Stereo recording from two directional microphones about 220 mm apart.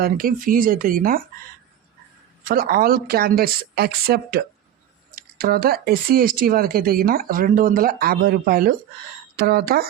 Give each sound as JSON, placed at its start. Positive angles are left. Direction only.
{"t": 0.0, "sound": "speech", "side_deg": -40}
{"t": 2.5, "sound": "speech", "side_deg": -40}